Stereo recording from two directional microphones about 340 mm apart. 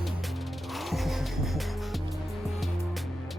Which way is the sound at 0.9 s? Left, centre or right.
Centre.